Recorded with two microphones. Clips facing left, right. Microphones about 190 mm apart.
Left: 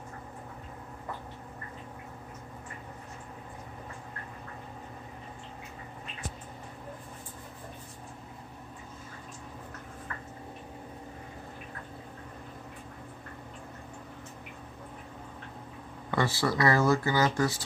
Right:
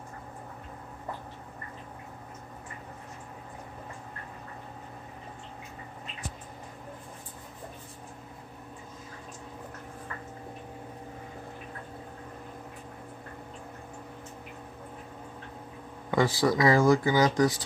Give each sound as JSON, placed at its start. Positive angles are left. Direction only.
{"t": 16.1, "sound": "speech", "side_deg": -15}